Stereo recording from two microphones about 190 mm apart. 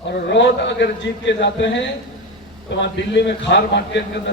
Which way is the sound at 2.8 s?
65° left (ahead or behind).